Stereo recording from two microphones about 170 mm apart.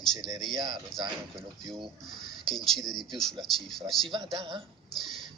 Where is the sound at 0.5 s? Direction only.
25° right (ahead or behind).